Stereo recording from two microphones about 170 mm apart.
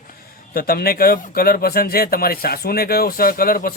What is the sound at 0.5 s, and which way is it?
A man's voice, 60° left (ahead or behind).